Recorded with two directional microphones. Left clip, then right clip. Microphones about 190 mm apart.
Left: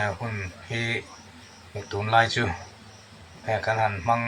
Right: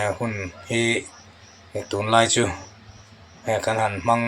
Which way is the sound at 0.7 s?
40° right (ahead or behind).